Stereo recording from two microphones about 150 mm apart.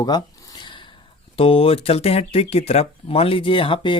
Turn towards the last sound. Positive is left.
turn(degrees=35)  # may be behind; listen again after turning